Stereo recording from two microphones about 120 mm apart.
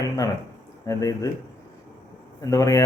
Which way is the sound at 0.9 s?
25° left (ahead or behind).